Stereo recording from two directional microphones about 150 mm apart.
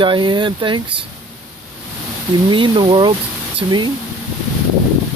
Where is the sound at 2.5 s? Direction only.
30° right (ahead or behind).